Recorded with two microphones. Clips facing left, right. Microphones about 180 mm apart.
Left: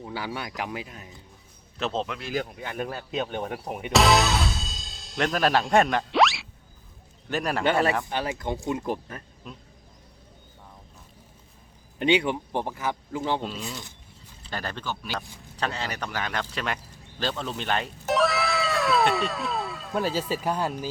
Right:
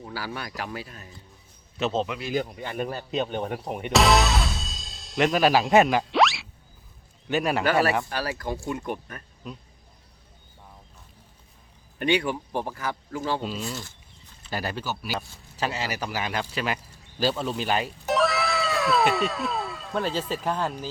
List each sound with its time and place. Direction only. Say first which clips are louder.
0.3 s speech: left 1 dB; 15° left (ahead or behind)
1.8 s speech: right 3 dB; centre (ahead or behind)
8.1 s speech: left 1 dB; 20° left (ahead or behind)
11.9 s speech: left 2 dB; 20° left (ahead or behind)
13.4 s speech: right 2 dB; centre (ahead or behind)